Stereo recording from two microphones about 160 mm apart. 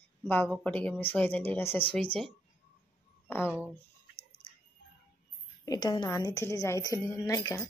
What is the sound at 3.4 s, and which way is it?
Speech, 10° right (ahead or behind).